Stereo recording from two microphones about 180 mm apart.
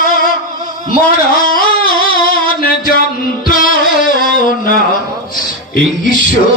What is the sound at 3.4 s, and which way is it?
Music, 50° left (ahead or behind).